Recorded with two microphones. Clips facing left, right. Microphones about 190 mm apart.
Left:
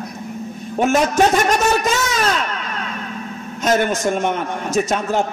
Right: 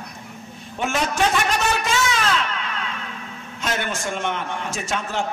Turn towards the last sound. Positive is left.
turn(degrees=40)  # may be behind; listen again after turning